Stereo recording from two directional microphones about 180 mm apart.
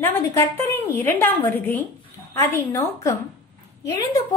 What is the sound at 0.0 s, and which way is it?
A woman's voice, 10° left (ahead or behind).